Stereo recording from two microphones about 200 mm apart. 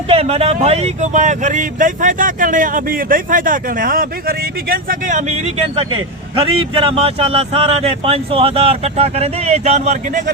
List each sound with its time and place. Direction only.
0.1 s speech: 30° right (ahead or behind)